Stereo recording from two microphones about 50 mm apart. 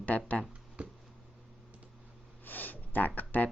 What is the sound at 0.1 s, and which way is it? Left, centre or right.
Speech, left.